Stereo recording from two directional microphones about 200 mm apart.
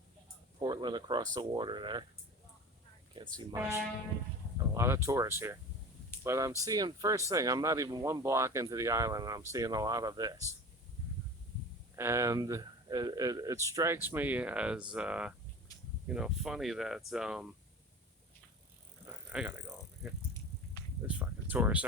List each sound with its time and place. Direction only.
0.6 s speech: 20° right (ahead or behind)
4.5 s a sound: 15° right (ahead or behind)
5.0 s speech: 15° right (ahead or behind)
11.9 s speech: 15° right (ahead or behind)
19.3 s vehicle: 5° right (ahead or behind)
21.1 s a sound: 10° right (ahead or behind)